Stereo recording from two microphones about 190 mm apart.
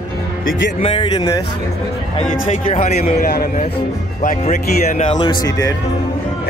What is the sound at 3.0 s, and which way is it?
Speech, 50° left (ahead or behind).